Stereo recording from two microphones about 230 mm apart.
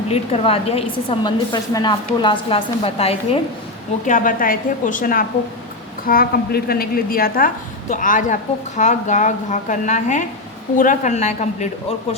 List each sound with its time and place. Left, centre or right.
0.1 s a woman's voice: left